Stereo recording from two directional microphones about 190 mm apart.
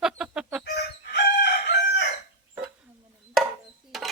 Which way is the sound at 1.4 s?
60° left (ahead or behind).